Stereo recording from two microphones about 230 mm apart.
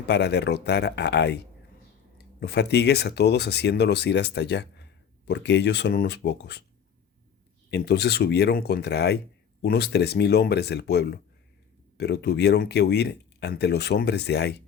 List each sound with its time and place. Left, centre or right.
0.0 s speech: left
7.7 s speech: left